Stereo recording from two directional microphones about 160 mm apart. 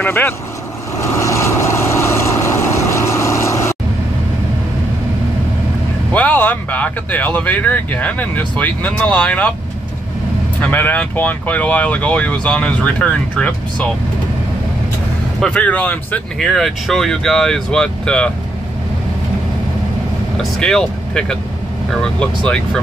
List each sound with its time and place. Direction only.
0.0 s speech: 15° left (ahead or behind)
1.1 s vehicle: 15° left (ahead or behind)
6.1 s speech: 10° left (ahead or behind)
10.6 s speech: 10° left (ahead or behind)
15.4 s speech: 5° left (ahead or behind)
20.3 s speech: 5° left (ahead or behind)